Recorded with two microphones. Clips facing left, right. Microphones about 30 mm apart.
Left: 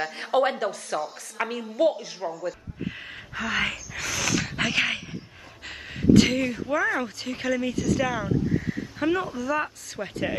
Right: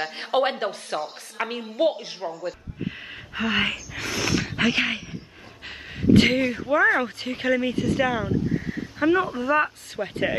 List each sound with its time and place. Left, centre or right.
0.0 s speech: right
1.4 s speech: centre
1.8 s speech: right
3.3 s speech: right
3.6 s speech: centre
4.0 s a sound: right
4.5 s speech: centre
6.1 s speech: right
6.4 s speech: centre
6.7 s speech: right
8.3 s a sound: centre
9.3 s speech: right
10.0 s speech: centre